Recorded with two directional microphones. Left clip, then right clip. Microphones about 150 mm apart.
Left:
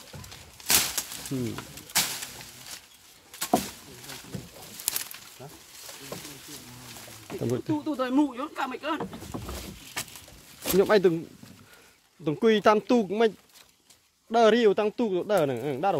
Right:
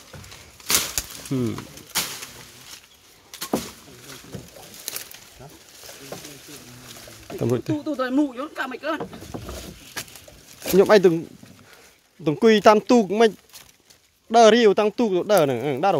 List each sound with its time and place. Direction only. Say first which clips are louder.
1.3 s speech: right 7 dB; 50° right (ahead or behind)
3.3 s a sound: left 1 dB; 30° left (ahead or behind)
7.3 s speech: right 6 dB; 45° right (ahead or behind)
7.8 s speech: right 3 dB; 15° right (ahead or behind)
10.8 s speech: right 6 dB; 35° right (ahead or behind)
12.3 s speech: right 6 dB; 35° right (ahead or behind)
14.3 s speech: right 6 dB; 35° right (ahead or behind)